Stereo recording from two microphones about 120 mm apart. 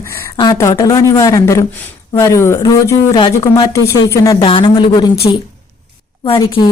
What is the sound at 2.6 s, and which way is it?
Speech, 35° left (ahead or behind).